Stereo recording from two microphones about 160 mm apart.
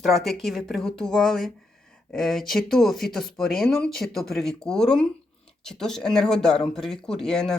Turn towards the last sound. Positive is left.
turn(degrees=5)  # may be behind; listen again after turning